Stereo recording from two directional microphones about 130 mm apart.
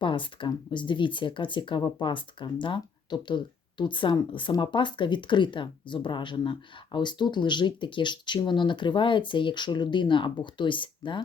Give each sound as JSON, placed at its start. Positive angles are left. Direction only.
{"t": 0.0, "sound": "speech", "side_deg": 40}